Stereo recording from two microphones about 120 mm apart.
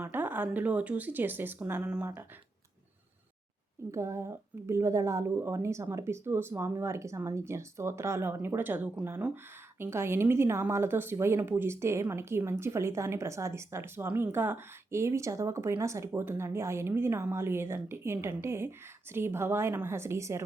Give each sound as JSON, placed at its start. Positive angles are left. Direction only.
{"t": 0.0, "sound": "speech", "side_deg": -15}
{"t": 3.9, "sound": "a woman's voice", "side_deg": -25}